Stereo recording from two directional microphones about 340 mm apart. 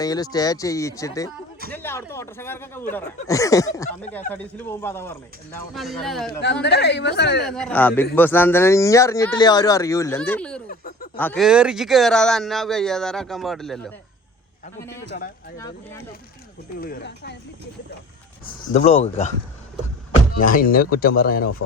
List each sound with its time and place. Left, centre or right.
0.0 s speech: centre
6.4 s speech: left
7.4 s speech: centre
10.7 s a sound: left
11.2 s speech: centre
15.5 s speech: centre
16.7 s speech: left
18.7 s speech: centre
20.4 s speech: left